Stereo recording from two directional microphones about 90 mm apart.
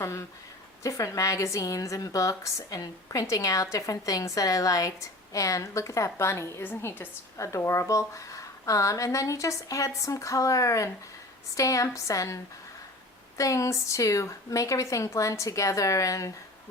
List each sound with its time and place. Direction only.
0.0 s a woman's voice: 35° left (ahead or behind)
7.3 s a woman's voice: 35° left (ahead or behind)